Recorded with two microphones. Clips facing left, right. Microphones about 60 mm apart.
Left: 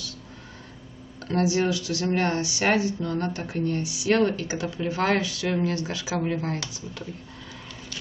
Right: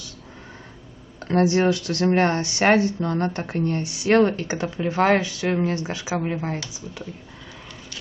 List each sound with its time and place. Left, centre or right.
1.2 s speech: right; by 7.1 s centre